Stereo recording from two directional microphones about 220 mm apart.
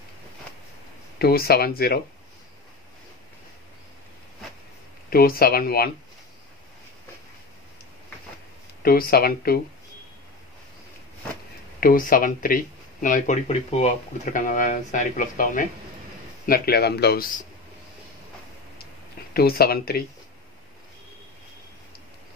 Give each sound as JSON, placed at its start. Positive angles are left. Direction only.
{"t": 1.2, "sound": "speech", "side_deg": 45}
{"t": 5.1, "sound": "speech", "side_deg": 45}
{"t": 8.8, "sound": "speech", "side_deg": 40}
{"t": 11.8, "sound": "speech", "side_deg": 40}
{"t": 19.3, "sound": "speech", "side_deg": 45}